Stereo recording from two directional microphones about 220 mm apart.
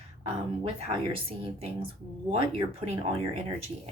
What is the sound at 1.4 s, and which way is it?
A woman's voice, 25° right (ahead or behind).